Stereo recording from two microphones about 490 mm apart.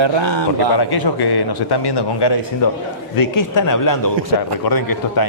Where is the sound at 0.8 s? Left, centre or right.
Left.